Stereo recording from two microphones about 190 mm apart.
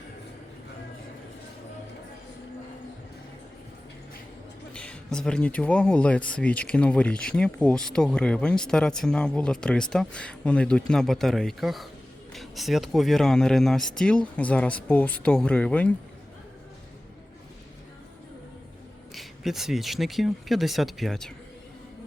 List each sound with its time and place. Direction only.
4.7 s a man's voice: 5° left (ahead or behind)
19.1 s speech: centre (ahead or behind)